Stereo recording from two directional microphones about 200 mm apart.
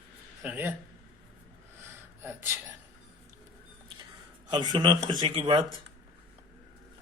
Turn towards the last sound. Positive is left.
turn(degrees=-25)  # may be behind; listen again after turning